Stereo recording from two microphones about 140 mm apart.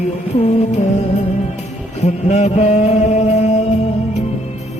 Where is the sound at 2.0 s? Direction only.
55° left (ahead or behind).